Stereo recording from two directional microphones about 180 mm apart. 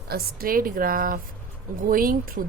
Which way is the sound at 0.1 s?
55° right (ahead or behind).